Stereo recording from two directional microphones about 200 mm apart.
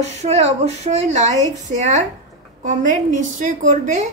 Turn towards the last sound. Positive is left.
turn(degrees=-40)  # may be behind; listen again after turning